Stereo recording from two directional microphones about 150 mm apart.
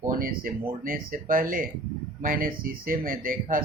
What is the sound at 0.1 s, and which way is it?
Speech, 65° right (ahead or behind).